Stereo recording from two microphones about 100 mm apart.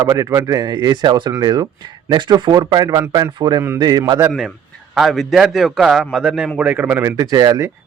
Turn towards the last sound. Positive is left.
turn(degrees=-35)  # may be behind; listen again after turning